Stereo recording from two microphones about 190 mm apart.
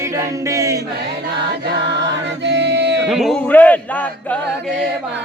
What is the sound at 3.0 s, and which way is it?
Male singing, centre (ahead or behind).